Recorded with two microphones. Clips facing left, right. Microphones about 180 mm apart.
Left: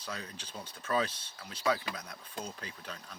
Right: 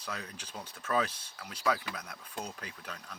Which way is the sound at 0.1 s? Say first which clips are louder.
Right 1 dB; 30° left (ahead or behind).